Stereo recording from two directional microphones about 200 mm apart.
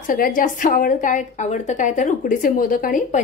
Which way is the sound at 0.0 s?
45° left (ahead or behind).